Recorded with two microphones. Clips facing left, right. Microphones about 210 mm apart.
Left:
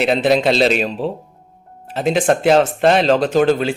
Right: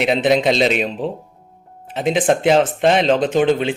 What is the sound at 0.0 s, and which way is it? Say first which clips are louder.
Speech: left 1 dB; centre (ahead or behind).